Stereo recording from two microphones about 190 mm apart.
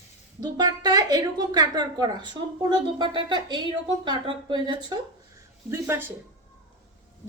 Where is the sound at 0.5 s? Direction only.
20° right (ahead or behind).